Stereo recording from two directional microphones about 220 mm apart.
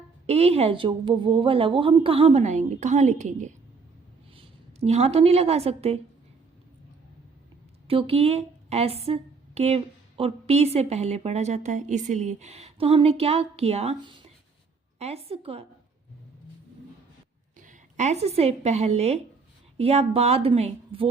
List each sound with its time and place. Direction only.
0.3 s a woman's voice: 30° right (ahead or behind)
7.9 s a woman's voice: 25° right (ahead or behind)
17.6 s a woman's voice: 35° right (ahead or behind)